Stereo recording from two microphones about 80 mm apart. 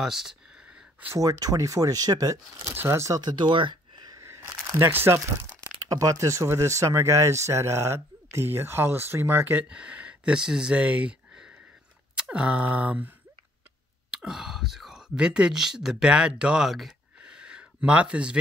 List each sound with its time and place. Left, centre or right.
0.0 s speech: centre
1.1 s speech: right
2.7 s speech: right
3.2 s speech: right
4.1 s a sound: right
4.9 s speech: right
5.6 s speech: right
9.7 s speech: centre
14.1 s speech: centre
17.2 s a sound: centre